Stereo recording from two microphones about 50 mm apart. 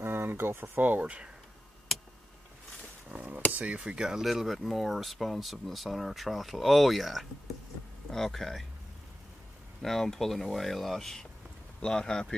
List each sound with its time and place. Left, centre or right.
0.0 s speech: right
1.0 s speech: right
3.1 s speech: right
3.6 s speech: right
4.2 s speech: centre
9.8 s speech: centre